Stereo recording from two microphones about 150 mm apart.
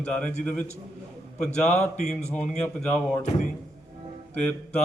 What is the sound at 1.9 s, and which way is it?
Speech, 50° left (ahead or behind).